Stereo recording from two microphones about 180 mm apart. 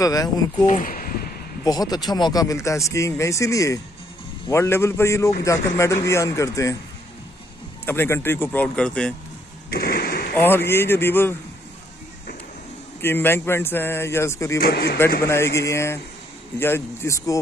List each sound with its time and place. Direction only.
0.0 s speech: 20° left (ahead or behind)
0.7 s speech: 50° left (ahead or behind)
1.6 s speech: 20° left (ahead or behind)
7.8 s speech: 10° left (ahead or behind)
9.7 s a sound: 55° left (ahead or behind)
10.3 s speech: 10° left (ahead or behind)
13.0 s speech: 10° left (ahead or behind)
14.6 s a man's voice: 60° left (ahead or behind)
15.2 s speech: 15° left (ahead or behind)